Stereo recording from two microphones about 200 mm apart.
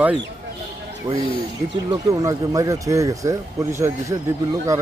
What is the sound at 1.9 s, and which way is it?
Speech, 15° right (ahead or behind).